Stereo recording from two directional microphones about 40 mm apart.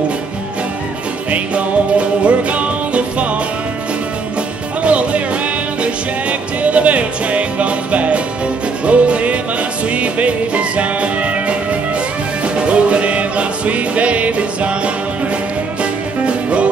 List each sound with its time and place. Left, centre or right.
1.3 s music: right
4.8 s music: right